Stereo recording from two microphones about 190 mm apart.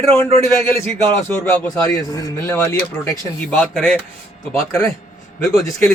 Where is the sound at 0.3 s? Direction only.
15° left (ahead or behind).